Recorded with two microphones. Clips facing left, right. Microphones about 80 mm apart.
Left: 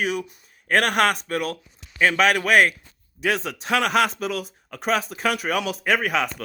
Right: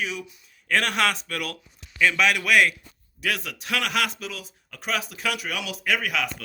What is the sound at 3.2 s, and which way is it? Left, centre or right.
A man's voice, left.